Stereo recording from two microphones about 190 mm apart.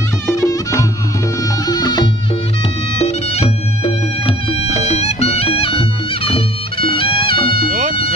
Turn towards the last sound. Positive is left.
turn(degrees=30)  # may be behind; listen again after turning